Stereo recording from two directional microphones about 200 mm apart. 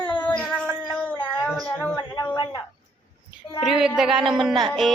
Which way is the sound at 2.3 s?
25° left (ahead or behind).